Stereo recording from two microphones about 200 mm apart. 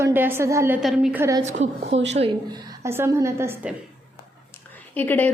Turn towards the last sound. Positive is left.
turn(degrees=10)  # may be behind; listen again after turning